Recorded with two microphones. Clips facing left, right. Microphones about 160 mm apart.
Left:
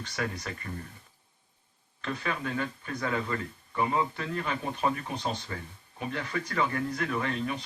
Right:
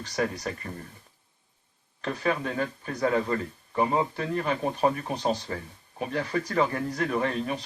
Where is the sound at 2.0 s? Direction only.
40° right (ahead or behind).